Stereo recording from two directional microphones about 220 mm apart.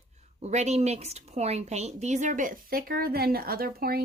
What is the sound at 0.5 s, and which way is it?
A woman's voice, 30° right (ahead or behind).